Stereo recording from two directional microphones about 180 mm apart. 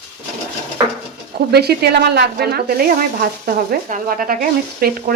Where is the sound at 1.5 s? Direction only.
65° right (ahead or behind).